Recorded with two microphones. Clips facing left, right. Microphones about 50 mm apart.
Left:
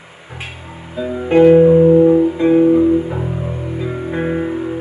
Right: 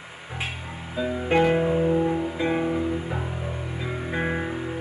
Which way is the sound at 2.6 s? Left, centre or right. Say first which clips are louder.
Left 14 dB; left.